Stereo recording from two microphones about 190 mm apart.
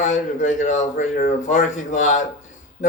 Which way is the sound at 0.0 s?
40° left (ahead or behind).